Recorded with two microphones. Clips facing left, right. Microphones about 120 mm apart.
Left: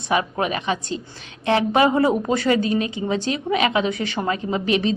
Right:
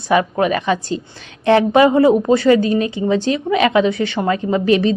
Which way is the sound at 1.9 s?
30° right (ahead or behind).